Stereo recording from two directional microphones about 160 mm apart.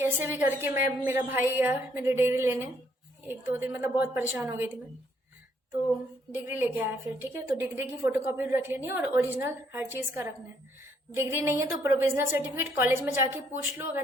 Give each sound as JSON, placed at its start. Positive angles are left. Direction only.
{"t": 0.0, "sound": "a woman's voice", "side_deg": -15}
{"t": 6.3, "sound": "a woman's voice", "side_deg": -10}